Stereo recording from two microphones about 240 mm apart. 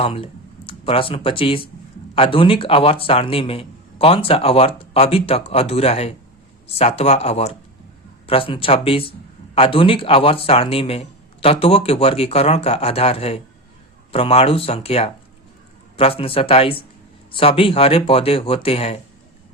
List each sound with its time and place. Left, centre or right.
0.0 s a man's voice: left